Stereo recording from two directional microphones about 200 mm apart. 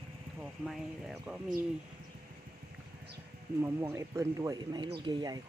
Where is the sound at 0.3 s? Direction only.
Centre (ahead or behind).